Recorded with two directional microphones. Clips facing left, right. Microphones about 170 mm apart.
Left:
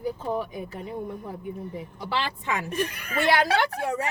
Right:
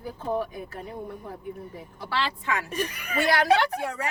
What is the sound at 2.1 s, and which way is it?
Speech, 20° left (ahead or behind).